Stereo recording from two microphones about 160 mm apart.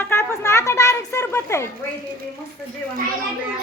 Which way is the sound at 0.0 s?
15° left (ahead or behind).